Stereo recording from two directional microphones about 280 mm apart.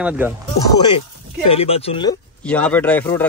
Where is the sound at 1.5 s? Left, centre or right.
Left.